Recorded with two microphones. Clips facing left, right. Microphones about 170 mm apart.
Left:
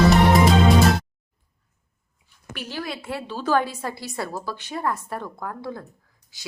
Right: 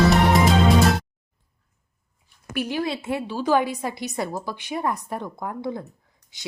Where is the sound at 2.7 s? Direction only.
25° right (ahead or behind).